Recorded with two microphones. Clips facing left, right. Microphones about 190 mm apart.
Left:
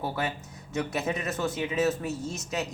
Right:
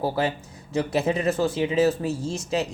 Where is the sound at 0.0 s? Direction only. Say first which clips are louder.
Right 7 dB; 30° right (ahead or behind).